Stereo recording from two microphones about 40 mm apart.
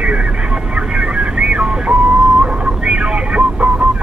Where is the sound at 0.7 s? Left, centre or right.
Right.